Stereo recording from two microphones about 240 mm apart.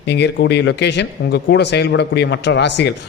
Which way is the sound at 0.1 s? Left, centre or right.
Left.